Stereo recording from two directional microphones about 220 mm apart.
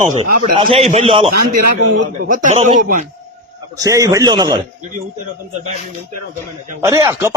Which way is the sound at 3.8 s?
15° right (ahead or behind).